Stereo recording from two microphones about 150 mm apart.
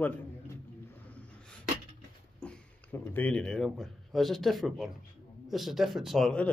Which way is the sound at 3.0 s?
10° left (ahead or behind).